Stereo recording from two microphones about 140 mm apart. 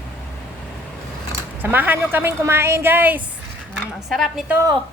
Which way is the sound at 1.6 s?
15° right (ahead or behind).